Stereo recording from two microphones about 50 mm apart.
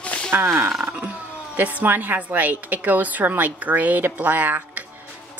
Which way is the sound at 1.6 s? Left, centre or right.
Right.